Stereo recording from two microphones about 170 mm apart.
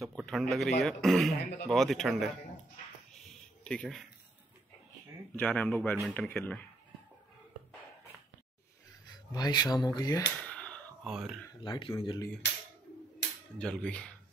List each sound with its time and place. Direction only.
0.0 s a man's voice: centre (ahead or behind)
3.6 s a man's voice: 5° left (ahead or behind)
5.3 s speech: 10° left (ahead or behind)
9.3 s speech: 20° left (ahead or behind)
10.4 s a sound: 5° left (ahead or behind)
11.1 s a man's voice: 5° right (ahead or behind)
11.6 s speech: 25° left (ahead or behind)
13.6 s a man's voice: 5° left (ahead or behind)